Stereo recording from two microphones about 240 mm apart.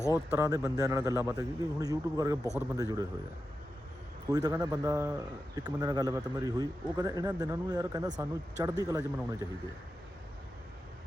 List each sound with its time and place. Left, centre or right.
0.0 s speech: centre
0.3 s a man's voice: centre
4.3 s a man's voice: centre